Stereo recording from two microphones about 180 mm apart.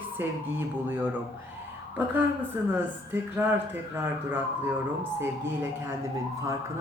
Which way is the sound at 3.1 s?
10° right (ahead or behind).